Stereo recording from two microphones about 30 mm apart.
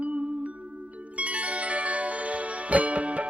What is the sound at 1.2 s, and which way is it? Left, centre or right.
Music, right.